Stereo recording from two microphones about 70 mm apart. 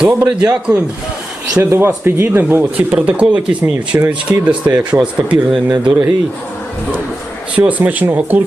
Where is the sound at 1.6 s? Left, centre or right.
Right.